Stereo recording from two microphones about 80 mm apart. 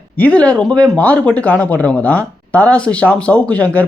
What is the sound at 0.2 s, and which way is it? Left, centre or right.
Speech, centre.